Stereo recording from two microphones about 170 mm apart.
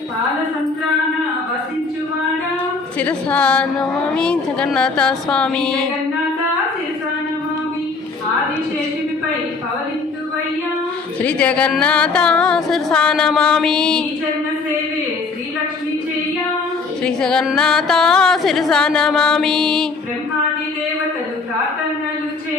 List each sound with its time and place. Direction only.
3.0 s a woman's voice: 5° left (ahead or behind)
11.2 s a woman's voice: 5° left (ahead or behind)
17.0 s a woman's voice: 5° left (ahead or behind)